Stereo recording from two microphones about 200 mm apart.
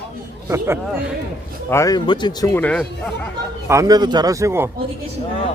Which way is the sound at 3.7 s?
15° right (ahead or behind).